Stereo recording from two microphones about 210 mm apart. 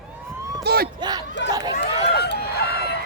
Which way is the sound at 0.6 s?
50° right (ahead or behind).